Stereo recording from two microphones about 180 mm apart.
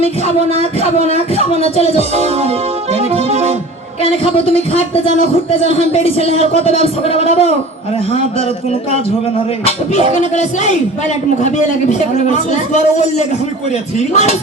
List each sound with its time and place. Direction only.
0.0 s speech: 35° left (ahead or behind)
2.1 s music: 35° right (ahead or behind)
4.2 s speech: 30° left (ahead or behind)
10.3 s speech: 40° left (ahead or behind)
14.1 s speech: 40° left (ahead or behind)